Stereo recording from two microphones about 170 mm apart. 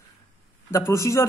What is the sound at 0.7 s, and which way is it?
Speech, 15° left (ahead or behind).